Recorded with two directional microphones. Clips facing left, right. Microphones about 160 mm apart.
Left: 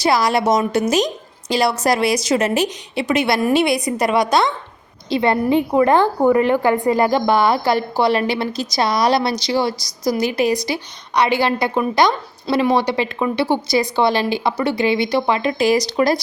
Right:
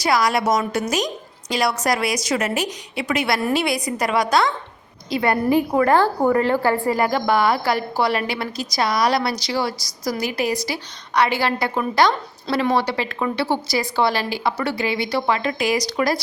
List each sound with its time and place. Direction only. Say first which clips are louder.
0.0 s a woman's voice: left 3 dB; 30° left (ahead or behind)